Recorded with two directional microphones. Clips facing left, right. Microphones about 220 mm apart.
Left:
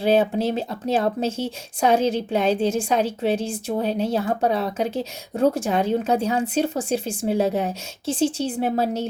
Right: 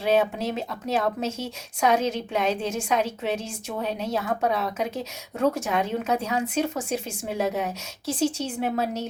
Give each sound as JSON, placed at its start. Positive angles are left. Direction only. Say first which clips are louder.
{"t": 0.0, "sound": "speech", "louder": "left 4 dB", "side_deg": 30}